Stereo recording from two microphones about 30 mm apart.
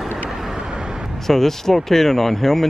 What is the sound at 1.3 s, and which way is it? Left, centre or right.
Speech, centre.